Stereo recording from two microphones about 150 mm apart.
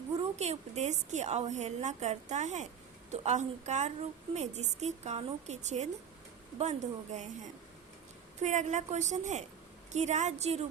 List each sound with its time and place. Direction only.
0.3 s a woman's voice: 45° right (ahead or behind)